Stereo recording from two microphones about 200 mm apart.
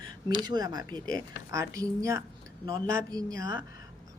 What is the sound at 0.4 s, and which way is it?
A woman's voice, 20° right (ahead or behind).